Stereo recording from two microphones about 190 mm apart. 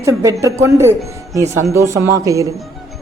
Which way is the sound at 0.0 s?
15° right (ahead or behind).